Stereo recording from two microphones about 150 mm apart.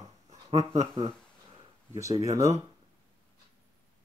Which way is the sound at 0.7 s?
35° right (ahead or behind).